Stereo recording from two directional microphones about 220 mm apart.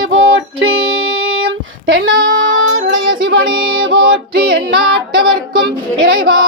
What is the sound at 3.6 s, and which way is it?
Music, 20° right (ahead or behind).